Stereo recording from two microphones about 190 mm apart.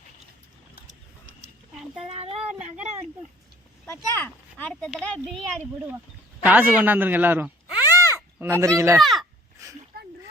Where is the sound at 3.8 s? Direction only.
10° left (ahead or behind).